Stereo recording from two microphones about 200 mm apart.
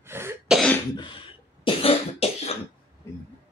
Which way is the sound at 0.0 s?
10° right (ahead or behind).